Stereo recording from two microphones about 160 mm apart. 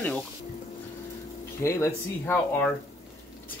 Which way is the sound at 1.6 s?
15° left (ahead or behind).